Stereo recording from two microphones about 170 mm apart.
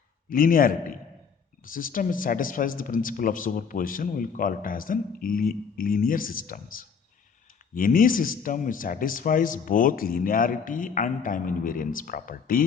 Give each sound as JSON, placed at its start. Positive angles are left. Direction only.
{"t": 0.3, "sound": "speech", "side_deg": 55}